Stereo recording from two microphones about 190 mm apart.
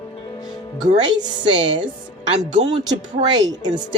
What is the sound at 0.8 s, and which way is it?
Speech, 40° right (ahead or behind).